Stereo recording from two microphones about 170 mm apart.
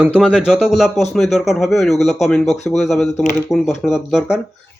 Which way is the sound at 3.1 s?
45° left (ahead or behind).